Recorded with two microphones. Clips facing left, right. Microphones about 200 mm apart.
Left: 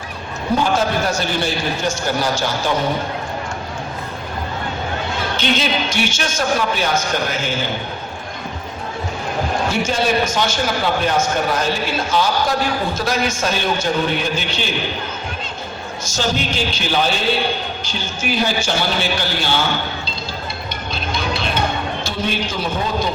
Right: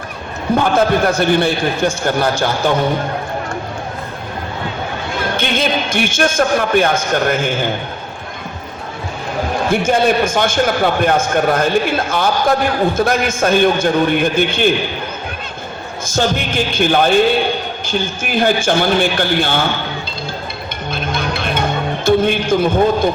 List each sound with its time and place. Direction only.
0.6 s a man's voice: 55° right (ahead or behind)
5.4 s a man's voice: 55° right (ahead or behind)
9.6 s a man's voice: 55° right (ahead or behind)
16.0 s a man's voice: 55° right (ahead or behind)
20.9 s music: 55° right (ahead or behind)
22.0 s a man's voice: 55° right (ahead or behind)